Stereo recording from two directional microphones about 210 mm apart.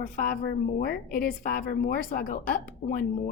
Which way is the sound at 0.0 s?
40° left (ahead or behind).